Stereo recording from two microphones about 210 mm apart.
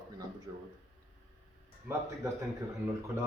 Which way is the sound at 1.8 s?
15° right (ahead or behind).